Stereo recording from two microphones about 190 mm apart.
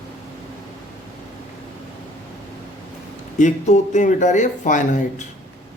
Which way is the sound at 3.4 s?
40° left (ahead or behind).